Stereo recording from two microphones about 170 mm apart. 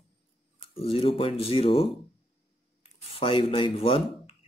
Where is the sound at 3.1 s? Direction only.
35° left (ahead or behind).